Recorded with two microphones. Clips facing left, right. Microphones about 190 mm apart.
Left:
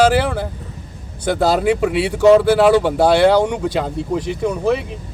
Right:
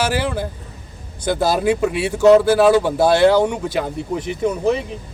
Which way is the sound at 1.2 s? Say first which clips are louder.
Left 2 dB; 15° right (ahead or behind).